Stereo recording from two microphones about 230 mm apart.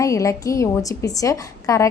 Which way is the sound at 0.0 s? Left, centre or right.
Centre.